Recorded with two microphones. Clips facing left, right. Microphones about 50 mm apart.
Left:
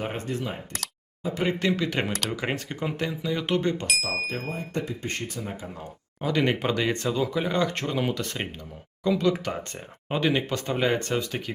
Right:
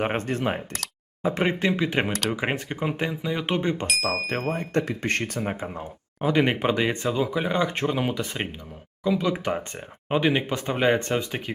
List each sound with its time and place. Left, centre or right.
0.0 s speech: right
1.5 s speech: right
4.3 s speech: right
5.4 s speech: right